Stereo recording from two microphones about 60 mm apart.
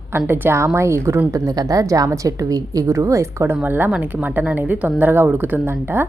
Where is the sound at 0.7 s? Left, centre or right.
Right.